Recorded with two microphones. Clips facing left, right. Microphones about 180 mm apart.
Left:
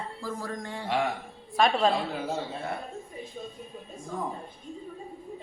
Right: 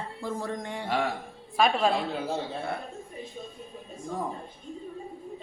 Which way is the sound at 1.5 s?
10° right (ahead or behind).